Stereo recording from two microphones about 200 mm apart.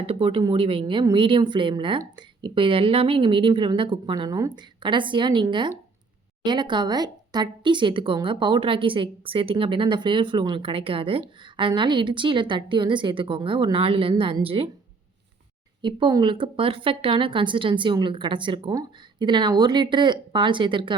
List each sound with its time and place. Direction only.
0.0 s speech: 30° right (ahead or behind)
15.8 s speech: 25° right (ahead or behind)